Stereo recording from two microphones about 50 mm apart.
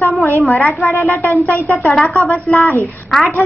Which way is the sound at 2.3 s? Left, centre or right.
Left.